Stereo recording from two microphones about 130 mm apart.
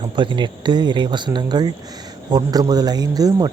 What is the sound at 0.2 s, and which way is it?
A man's voice, 40° right (ahead or behind).